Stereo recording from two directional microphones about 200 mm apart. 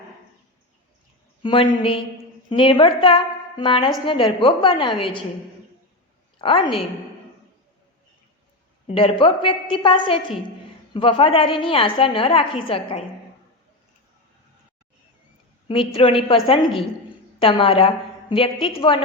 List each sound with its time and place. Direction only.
1.4 s a woman's voice: 25° left (ahead or behind)
6.4 s a woman's voice: 25° left (ahead or behind)
8.9 s a woman's voice: 30° left (ahead or behind)
15.9 s a woman's voice: 30° left (ahead or behind)